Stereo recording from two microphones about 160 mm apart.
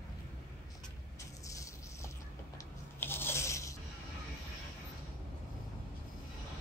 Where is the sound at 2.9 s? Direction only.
15° left (ahead or behind).